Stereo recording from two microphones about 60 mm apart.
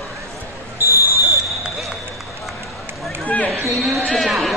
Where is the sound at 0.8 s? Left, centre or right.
Right.